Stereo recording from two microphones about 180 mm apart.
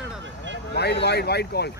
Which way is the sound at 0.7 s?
65° left (ahead or behind).